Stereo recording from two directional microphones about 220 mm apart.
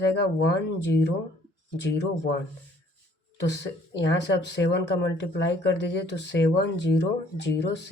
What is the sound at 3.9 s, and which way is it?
Speech, 50° left (ahead or behind).